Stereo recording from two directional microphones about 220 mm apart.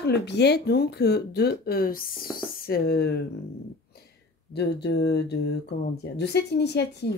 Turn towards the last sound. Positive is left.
turn(degrees=50)  # may be behind; listen again after turning